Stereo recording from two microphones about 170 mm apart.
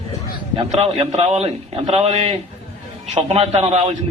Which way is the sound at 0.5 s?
35° right (ahead or behind).